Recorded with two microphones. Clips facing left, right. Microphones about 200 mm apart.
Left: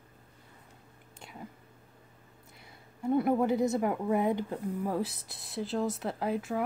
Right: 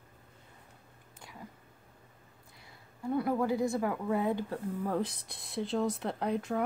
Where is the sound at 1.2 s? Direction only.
25° left (ahead or behind).